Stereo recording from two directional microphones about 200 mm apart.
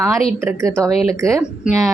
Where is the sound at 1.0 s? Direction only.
15° right (ahead or behind).